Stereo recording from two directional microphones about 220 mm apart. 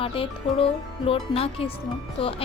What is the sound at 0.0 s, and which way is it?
Speech, 25° left (ahead or behind).